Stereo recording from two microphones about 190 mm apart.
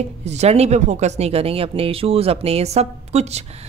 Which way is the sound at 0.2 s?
35° right (ahead or behind).